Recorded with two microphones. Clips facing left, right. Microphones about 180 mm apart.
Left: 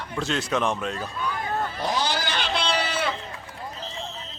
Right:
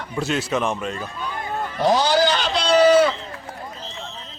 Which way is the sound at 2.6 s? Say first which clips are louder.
Right 13 dB; 45° right (ahead or behind).